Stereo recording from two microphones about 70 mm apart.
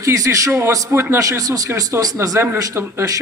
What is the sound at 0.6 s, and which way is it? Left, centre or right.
Speech, right.